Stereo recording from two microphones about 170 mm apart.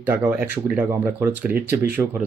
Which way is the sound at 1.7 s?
65° right (ahead or behind).